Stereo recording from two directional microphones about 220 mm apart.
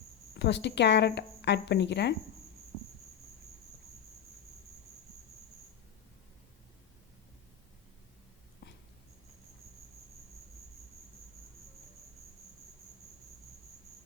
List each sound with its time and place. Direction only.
0.3 s a woman's voice: 50° left (ahead or behind)
8.6 s dog: 50° left (ahead or behind)